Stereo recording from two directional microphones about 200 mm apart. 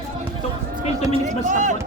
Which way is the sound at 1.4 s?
40° right (ahead or behind).